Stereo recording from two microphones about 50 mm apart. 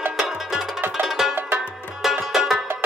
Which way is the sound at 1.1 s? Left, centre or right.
Centre.